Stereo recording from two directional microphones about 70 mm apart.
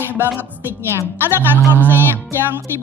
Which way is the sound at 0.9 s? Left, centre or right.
Right.